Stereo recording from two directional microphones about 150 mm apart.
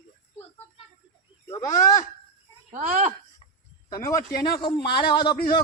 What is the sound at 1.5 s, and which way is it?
Speech, 20° left (ahead or behind).